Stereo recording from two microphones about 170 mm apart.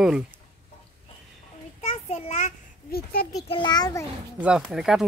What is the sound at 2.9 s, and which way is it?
Speech, 65° left (ahead or behind).